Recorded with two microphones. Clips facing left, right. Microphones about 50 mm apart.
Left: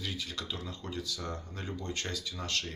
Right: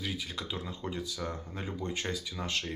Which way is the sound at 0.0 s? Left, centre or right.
Centre.